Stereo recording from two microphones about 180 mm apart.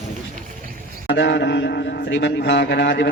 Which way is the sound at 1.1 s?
75° left (ahead or behind).